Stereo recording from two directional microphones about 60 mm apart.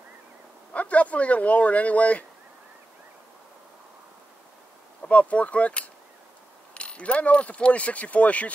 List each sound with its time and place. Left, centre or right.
0.7 s speech: left
5.0 s speech: left